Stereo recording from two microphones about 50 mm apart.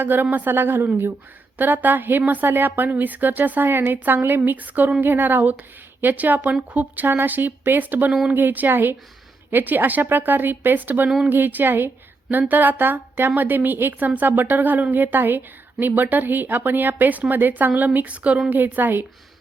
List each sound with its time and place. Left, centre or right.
0.0 s a woman's voice: right
18.5 s a woman's voice: right